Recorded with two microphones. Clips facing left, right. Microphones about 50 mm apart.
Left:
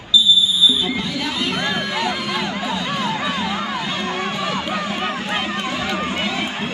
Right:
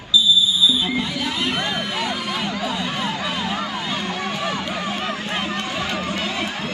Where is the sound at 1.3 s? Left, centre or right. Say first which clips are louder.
Left 1 dB; right.